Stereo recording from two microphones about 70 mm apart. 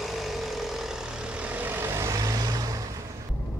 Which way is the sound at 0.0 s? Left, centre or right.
Centre.